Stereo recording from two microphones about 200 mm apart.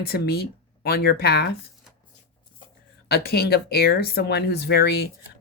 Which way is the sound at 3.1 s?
50° left (ahead or behind).